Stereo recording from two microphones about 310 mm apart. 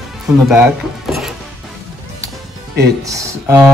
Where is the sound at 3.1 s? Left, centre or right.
Centre.